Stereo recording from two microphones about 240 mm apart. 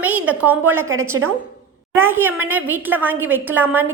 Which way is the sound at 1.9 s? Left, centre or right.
Centre.